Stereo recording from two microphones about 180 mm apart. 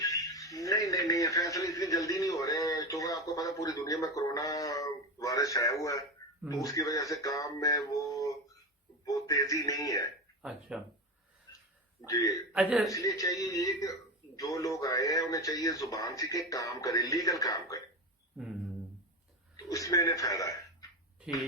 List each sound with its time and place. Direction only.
0.0 s radio: 20° left (ahead or behind)
6.6 s speech: 20° left (ahead or behind)
10.4 s speech: 5° right (ahead or behind)
12.0 s speech: 20° left (ahead or behind)
12.5 s speech: 5° right (ahead or behind)
12.9 s speech: 20° left (ahead or behind)
19.6 s speech: 20° left (ahead or behind)